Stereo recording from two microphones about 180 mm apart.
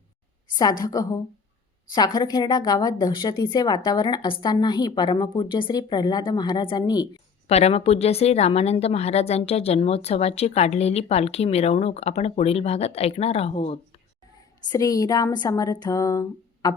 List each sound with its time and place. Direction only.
0.5 s a woman's voice: 20° left (ahead or behind)
7.4 s a woman's voice: 35° left (ahead or behind)
14.7 s a woman's voice: 20° left (ahead or behind)